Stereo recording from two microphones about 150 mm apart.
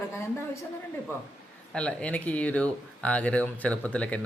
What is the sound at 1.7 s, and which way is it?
A woman's voice, 5° left (ahead or behind).